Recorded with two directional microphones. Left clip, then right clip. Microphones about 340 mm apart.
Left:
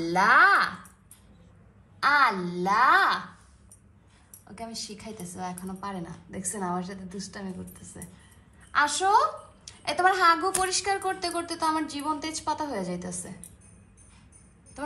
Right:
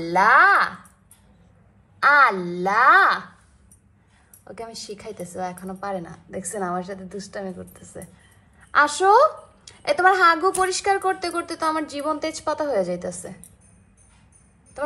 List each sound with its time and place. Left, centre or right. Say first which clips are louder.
0.0 s a sound: right 4 dB; centre
2.0 s a woman's voice: right 6 dB; centre
4.5 s a woman's voice: right 4 dB; centre